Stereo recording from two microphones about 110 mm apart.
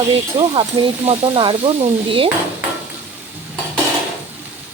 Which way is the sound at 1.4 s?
50° right (ahead or behind).